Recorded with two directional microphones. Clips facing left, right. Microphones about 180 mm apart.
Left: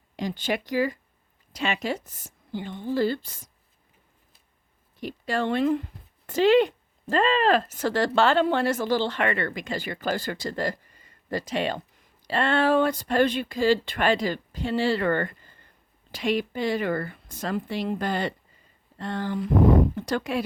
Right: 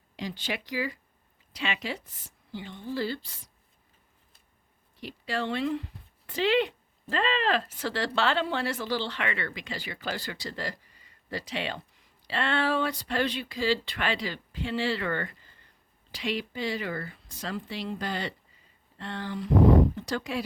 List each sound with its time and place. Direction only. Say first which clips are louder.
0.2 s speech: left 6 dB; 50° left (ahead or behind)
4.9 s speech: left 5 dB; 50° left (ahead or behind)